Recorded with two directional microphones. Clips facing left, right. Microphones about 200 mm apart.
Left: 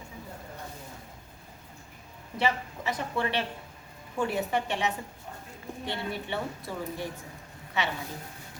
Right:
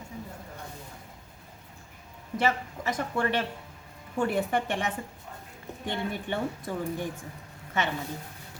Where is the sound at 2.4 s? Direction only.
45° right (ahead or behind).